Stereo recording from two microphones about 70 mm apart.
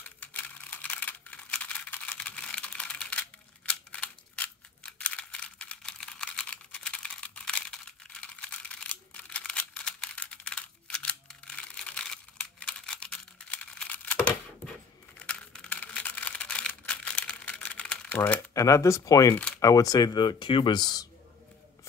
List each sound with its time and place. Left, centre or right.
0.2 s computer keyboard: left
5.8 s computer keyboard: centre
11.2 s a sound: centre
15.1 s crumpling: centre
15.8 s a sound: left
18.5 s speech: left